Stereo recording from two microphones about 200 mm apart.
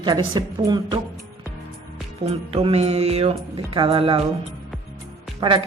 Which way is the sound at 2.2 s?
30° right (ahead or behind).